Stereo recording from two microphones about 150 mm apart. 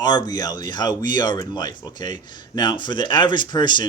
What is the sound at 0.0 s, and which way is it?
A man's voice, 25° left (ahead or behind).